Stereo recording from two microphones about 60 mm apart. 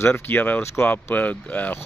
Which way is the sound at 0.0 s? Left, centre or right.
Left.